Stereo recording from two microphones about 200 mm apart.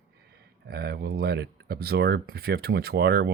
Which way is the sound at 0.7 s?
50° right (ahead or behind).